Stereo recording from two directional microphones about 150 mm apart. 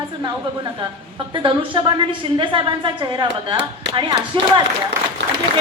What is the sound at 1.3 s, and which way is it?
A woman's voice, 35° right (ahead or behind).